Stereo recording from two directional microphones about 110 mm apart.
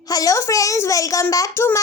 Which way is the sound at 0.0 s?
35° left (ahead or behind).